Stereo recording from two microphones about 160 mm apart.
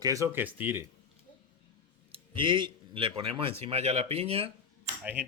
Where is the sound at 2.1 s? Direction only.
30° right (ahead or behind).